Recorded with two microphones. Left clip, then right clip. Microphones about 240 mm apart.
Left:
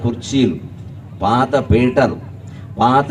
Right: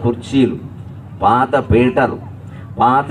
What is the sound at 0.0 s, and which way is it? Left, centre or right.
A man's voice, left.